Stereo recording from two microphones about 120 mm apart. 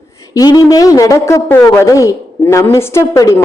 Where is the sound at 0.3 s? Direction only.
30° left (ahead or behind).